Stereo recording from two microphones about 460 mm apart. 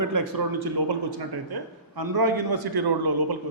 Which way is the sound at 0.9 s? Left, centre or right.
Right.